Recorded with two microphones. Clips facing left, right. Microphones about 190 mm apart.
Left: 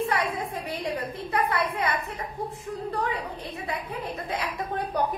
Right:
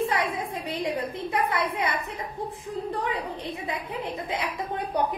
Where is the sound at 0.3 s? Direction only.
15° right (ahead or behind).